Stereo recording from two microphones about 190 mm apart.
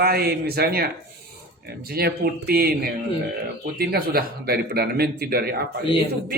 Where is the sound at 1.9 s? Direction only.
55° right (ahead or behind).